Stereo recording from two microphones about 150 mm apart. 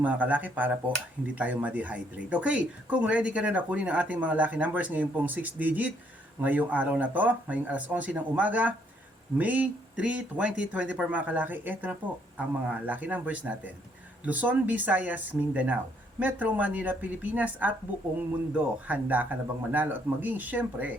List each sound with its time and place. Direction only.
0.0 s speech: 10° right (ahead or behind)